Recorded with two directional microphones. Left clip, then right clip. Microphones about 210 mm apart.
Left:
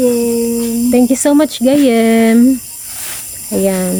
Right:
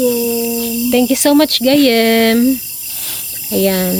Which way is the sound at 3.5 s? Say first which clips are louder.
Even; 5° left (ahead or behind).